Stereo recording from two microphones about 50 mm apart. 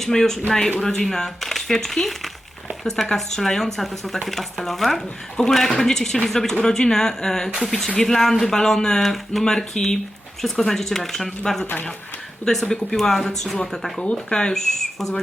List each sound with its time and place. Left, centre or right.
0.0 s speech: centre
11.6 s speech: left
12.6 s speech: centre